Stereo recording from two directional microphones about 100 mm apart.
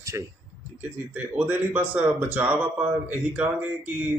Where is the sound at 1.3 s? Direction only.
20° right (ahead or behind).